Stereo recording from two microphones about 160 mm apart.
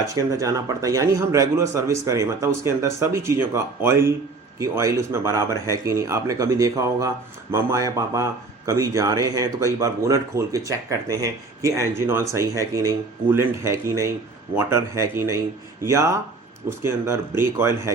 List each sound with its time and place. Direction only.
0.0 s a man's voice: 20° right (ahead or behind)